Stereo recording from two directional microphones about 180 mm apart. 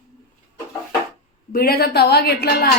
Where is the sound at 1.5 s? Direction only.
55° left (ahead or behind).